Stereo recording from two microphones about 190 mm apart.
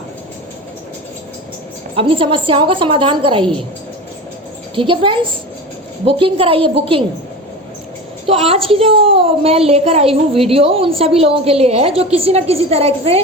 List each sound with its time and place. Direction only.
2.0 s a woman's voice: 30° right (ahead or behind)
4.7 s a woman's voice: 25° right (ahead or behind)
8.3 s a woman's voice: 30° right (ahead or behind)